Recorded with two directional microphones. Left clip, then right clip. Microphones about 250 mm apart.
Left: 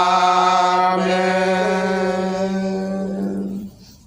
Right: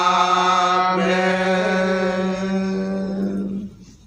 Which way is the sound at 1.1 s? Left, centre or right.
Centre.